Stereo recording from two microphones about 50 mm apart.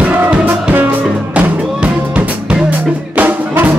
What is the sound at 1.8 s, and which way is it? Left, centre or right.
Music, right.